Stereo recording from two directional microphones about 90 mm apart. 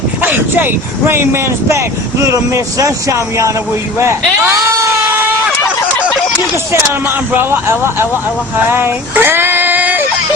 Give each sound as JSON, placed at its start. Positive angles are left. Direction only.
{"t": 0.2, "sound": "speech", "side_deg": -20}
{"t": 4.5, "sound": "a sound", "side_deg": -35}
{"t": 7.3, "sound": "a man's voice", "side_deg": -25}
{"t": 8.7, "sound": "female singing", "side_deg": -25}